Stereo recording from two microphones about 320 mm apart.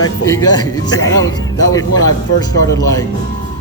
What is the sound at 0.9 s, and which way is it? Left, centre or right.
Speech, left.